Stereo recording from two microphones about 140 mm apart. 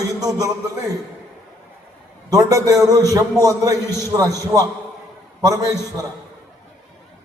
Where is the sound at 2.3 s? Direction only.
25° right (ahead or behind).